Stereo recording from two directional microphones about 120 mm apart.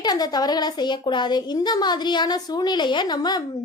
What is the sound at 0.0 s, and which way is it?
Speech, 35° left (ahead or behind).